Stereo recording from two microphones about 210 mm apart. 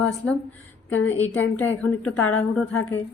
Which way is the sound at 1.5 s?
10° left (ahead or behind).